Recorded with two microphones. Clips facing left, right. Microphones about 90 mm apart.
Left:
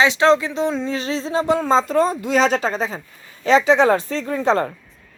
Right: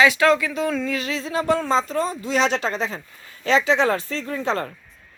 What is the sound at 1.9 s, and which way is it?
Speech, 55° left (ahead or behind).